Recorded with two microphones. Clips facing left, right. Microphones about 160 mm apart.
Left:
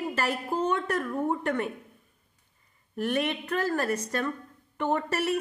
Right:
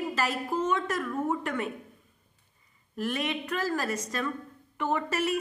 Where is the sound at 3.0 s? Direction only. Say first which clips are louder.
Left 3 dB; 60° left (ahead or behind).